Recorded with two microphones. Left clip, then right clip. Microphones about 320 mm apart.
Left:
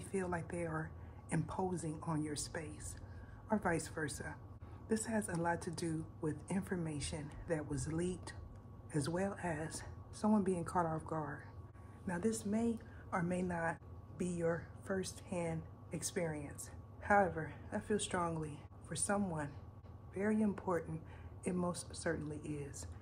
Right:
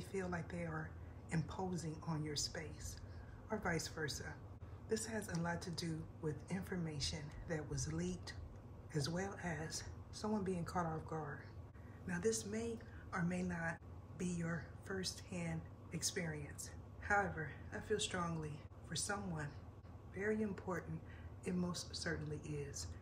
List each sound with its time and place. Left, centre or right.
0.0 s a woman's voice: left